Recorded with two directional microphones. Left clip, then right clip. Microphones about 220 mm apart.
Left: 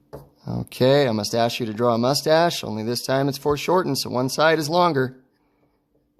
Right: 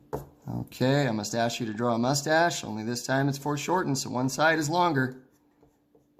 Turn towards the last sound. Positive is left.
turn(degrees=40)  # may be behind; listen again after turning